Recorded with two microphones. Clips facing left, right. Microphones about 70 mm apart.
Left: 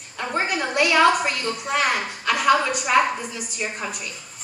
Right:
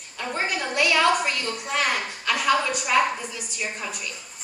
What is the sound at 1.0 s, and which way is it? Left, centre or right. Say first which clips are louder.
A woman's voice: left 3 dB; centre.